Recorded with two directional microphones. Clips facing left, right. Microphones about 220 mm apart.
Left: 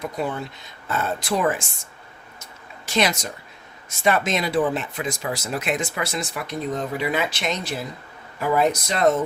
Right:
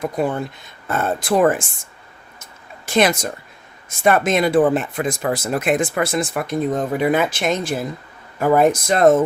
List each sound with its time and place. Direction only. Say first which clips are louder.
0.0 s speech: right 6 dB; 50° right (ahead or behind)
2.4 s a sound: right 3 dB; 50° right (ahead or behind)
3.8 s speech: right 5 dB; 50° right (ahead or behind)